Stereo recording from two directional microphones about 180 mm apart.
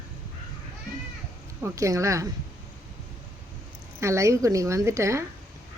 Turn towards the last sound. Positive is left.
turn(degrees=-15)  # may be behind; listen again after turning